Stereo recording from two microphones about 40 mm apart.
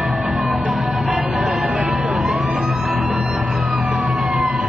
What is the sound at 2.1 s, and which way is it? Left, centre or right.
Vehicle, centre.